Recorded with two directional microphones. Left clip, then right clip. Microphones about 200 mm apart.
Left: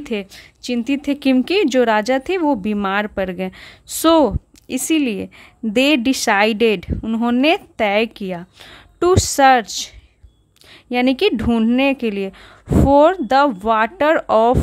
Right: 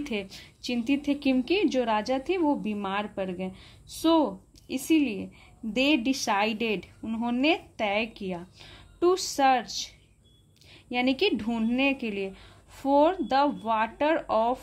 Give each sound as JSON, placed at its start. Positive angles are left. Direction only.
{"t": 0.0, "sound": "a woman's voice", "side_deg": 30}